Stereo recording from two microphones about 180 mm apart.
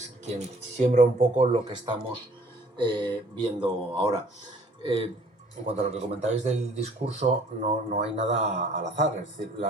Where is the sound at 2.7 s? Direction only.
25° right (ahead or behind).